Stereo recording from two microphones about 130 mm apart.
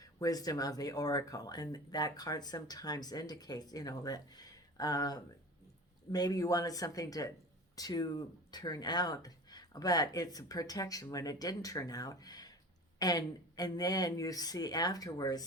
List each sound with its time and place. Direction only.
0.0 s speech: 30° left (ahead or behind)